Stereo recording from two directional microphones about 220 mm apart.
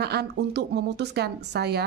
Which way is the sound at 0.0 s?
45° right (ahead or behind).